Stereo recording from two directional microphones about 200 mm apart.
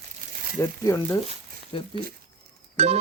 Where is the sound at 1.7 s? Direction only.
25° left (ahead or behind).